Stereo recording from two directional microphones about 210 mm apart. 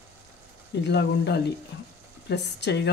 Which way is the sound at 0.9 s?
55° left (ahead or behind).